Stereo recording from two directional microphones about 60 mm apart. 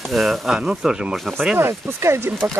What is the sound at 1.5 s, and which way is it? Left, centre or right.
Speech, right.